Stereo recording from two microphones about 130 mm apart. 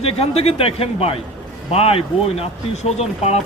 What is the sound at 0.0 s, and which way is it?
Speech, 50° left (ahead or behind).